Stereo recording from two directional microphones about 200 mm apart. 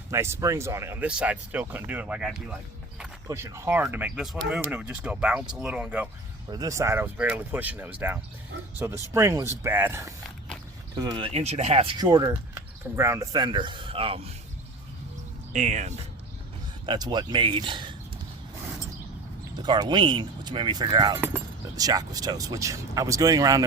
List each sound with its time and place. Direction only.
0.1 s speech: 15° right (ahead or behind)
6.5 s speech: 20° right (ahead or behind)
12.0 s speech: 15° right (ahead or behind)
15.5 s speech: 35° right (ahead or behind)
16.8 s speech: 20° right (ahead or behind)
19.6 s speech: 20° right (ahead or behind)